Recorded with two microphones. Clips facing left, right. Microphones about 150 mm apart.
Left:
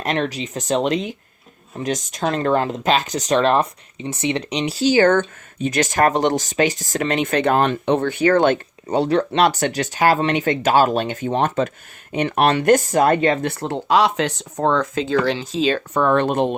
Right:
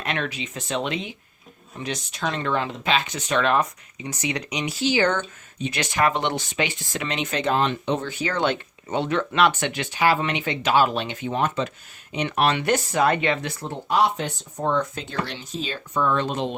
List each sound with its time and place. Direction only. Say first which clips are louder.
0.0 s speech: left 6 dB; 40° left (ahead or behind)
13.5 s speech: left 7 dB; 80° left; by 16.6 s 55° left (ahead or behind)